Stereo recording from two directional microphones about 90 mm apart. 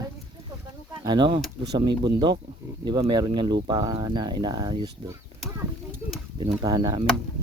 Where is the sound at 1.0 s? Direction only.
55° right (ahead or behind).